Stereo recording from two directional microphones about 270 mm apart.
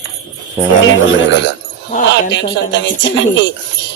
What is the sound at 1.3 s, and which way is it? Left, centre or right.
A woman's voice, left.